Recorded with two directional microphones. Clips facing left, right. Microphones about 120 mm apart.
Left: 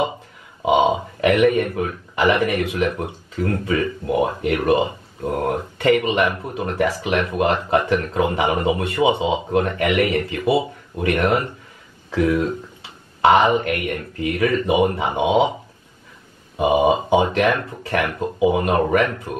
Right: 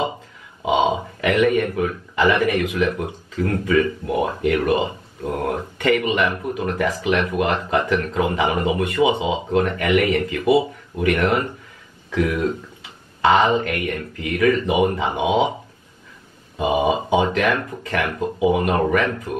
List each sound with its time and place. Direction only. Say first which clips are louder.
0.6 s speech: left 2 dB; 20° left (ahead or behind)
16.5 s speech: left 3 dB; 20° left (ahead or behind)